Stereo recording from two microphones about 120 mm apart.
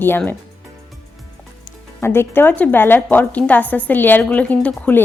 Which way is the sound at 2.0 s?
20° left (ahead or behind).